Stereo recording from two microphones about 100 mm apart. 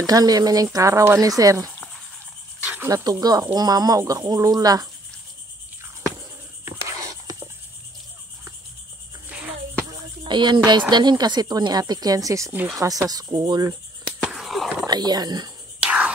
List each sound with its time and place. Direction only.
0.0 s speech: 40° right (ahead or behind)
2.8 s speech: 35° right (ahead or behind)
6.6 s a sound: 30° right (ahead or behind)
9.8 s music: 45° right (ahead or behind)
10.9 s speech: 45° right (ahead or behind)
14.2 s skateboard: centre (ahead or behind)
14.9 s speech: 45° right (ahead or behind)
15.8 s a sound: 10° right (ahead or behind)